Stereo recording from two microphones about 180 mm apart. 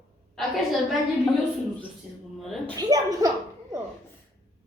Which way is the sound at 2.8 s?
20° right (ahead or behind).